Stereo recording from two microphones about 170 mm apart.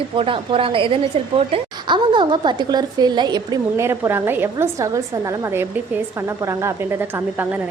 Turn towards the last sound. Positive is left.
turn(degrees=-10)  # may be behind; listen again after turning